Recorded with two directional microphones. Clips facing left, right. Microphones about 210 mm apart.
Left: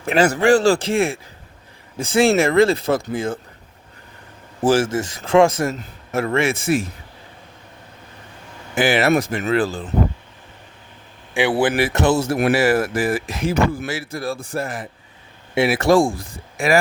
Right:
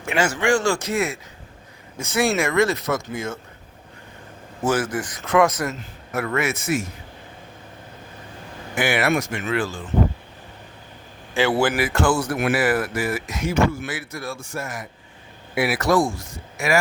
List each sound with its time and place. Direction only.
0.0 s speech: 35° left (ahead or behind)
4.6 s a man's voice: 30° left (ahead or behind)
8.7 s speech: 30° left (ahead or behind)
11.8 s a man's voice: 25° left (ahead or behind)